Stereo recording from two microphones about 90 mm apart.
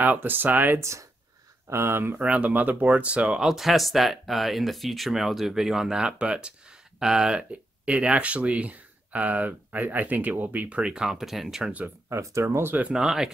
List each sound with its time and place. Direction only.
0.0 s speech: 20° right (ahead or behind)
0.7 s speech: 35° right (ahead or behind)
2.1 s speech: 15° right (ahead or behind)
12.1 s speech: 35° right (ahead or behind); by 13.3 s 5° right (ahead or behind)